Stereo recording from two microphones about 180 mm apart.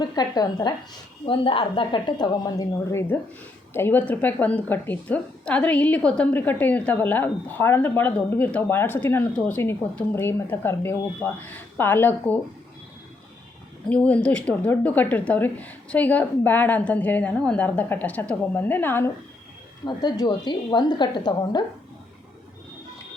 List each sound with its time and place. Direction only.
0.0 s a woman's voice: 20° left (ahead or behind)
13.8 s a woman's voice: 10° left (ahead or behind)
19.8 s a woman's voice: 25° left (ahead or behind)